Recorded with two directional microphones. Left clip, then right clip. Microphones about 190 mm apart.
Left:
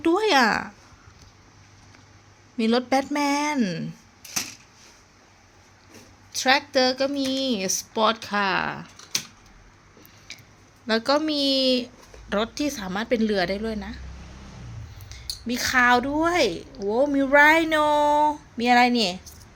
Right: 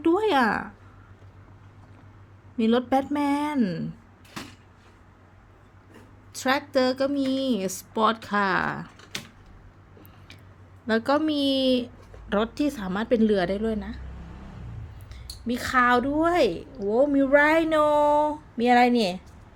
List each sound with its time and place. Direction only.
0.0 s speech: centre (ahead or behind)
2.6 s speech: centre (ahead or behind)
6.4 s speech: centre (ahead or behind)
10.8 s speech: 10° right (ahead or behind)
15.1 s speech: 10° right (ahead or behind)